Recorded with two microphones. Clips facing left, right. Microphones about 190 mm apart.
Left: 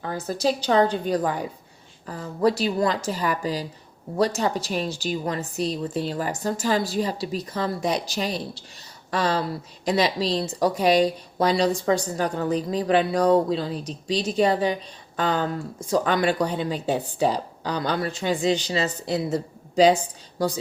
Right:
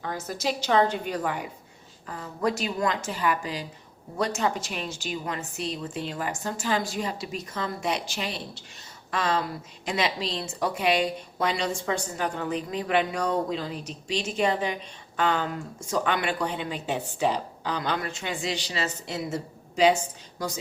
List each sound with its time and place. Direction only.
0.0 s a woman's voice: 30° left (ahead or behind)